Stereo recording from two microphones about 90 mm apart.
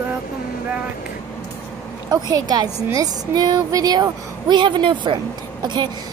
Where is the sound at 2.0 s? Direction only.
45° right (ahead or behind).